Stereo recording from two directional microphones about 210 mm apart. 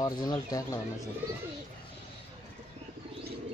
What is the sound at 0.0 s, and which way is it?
Speech, 20° left (ahead or behind).